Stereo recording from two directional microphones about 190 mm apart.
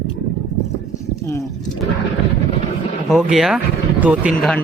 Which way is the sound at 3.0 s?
Centre (ahead or behind).